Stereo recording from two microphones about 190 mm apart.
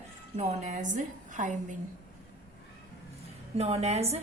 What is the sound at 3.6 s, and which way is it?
Speech, 35° right (ahead or behind).